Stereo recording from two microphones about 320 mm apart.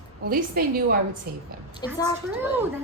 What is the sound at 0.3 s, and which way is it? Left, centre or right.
Speech, right.